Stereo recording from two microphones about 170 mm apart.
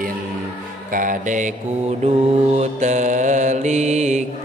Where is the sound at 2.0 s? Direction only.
40° right (ahead or behind).